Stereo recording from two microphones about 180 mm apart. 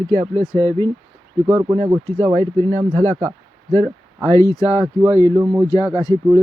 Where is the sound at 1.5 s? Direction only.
10° right (ahead or behind).